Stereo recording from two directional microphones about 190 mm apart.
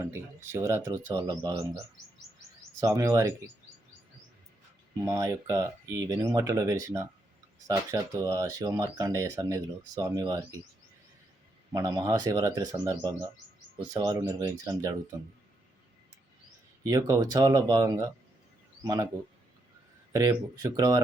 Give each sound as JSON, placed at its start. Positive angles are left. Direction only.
{"t": 0.0, "sound": "speech", "side_deg": -15}
{"t": 2.8, "sound": "speech", "side_deg": -15}
{"t": 5.0, "sound": "speech", "side_deg": -15}
{"t": 11.7, "sound": "speech", "side_deg": -20}
{"t": 16.8, "sound": "a man's voice", "side_deg": -20}
{"t": 20.1, "sound": "speech", "side_deg": -15}